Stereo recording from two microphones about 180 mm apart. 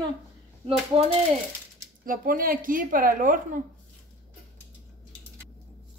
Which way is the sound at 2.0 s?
50° right (ahead or behind).